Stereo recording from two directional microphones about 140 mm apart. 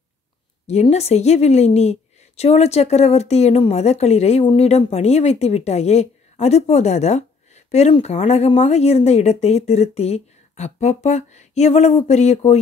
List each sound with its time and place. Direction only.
0.7 s speech: 50° left (ahead or behind)